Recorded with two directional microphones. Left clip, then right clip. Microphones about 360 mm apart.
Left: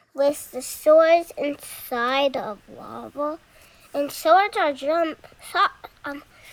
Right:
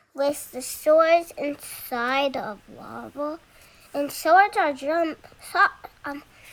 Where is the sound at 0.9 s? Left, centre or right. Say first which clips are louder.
Left 2 dB; centre.